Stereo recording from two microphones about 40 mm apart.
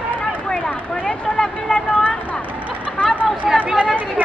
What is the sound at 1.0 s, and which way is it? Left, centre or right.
Speech, centre.